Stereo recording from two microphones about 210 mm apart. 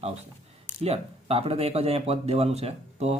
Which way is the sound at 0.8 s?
30° right (ahead or behind).